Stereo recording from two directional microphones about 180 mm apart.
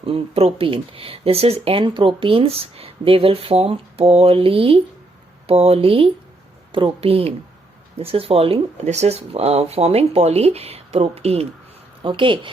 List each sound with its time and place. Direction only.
0.0 s speech: 30° right (ahead or behind)